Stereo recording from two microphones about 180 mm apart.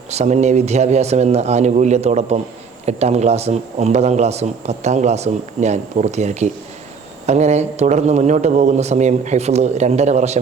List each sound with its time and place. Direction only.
0.1 s a man's voice: 40° right (ahead or behind)